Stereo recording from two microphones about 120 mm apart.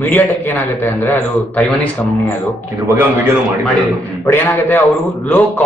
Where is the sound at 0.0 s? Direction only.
15° left (ahead or behind).